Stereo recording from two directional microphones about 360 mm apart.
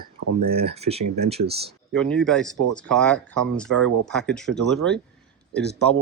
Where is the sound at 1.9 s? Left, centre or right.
Centre.